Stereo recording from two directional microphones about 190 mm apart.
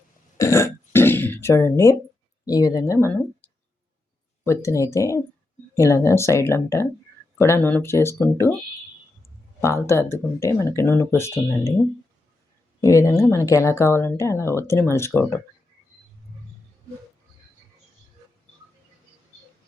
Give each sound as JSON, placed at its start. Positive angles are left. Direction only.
{"t": 0.3, "sound": "throat clearing", "side_deg": 15}
{"t": 2.4, "sound": "speech", "side_deg": 20}
{"t": 9.6, "sound": "speech", "side_deg": 15}
{"t": 12.8, "sound": "speech", "side_deg": 15}